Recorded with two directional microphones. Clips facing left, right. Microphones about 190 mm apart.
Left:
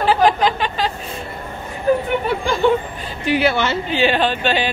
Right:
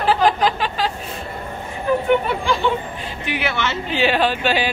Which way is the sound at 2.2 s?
45° left (ahead or behind).